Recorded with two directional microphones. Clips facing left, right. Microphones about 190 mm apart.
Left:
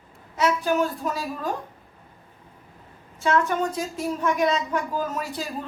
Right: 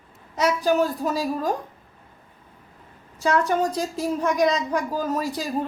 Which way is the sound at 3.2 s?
35° right (ahead or behind).